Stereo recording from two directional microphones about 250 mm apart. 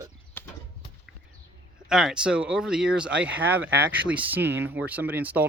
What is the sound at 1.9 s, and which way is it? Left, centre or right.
Speech, centre.